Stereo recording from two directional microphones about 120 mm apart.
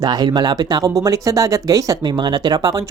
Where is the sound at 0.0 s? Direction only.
35° right (ahead or behind).